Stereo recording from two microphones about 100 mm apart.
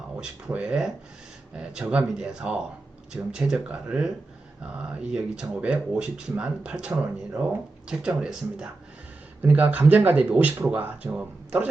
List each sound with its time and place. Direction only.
0.2 s speech: 10° right (ahead or behind)